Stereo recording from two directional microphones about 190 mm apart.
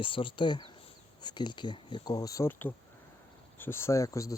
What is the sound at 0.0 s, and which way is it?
Speech, 25° left (ahead or behind).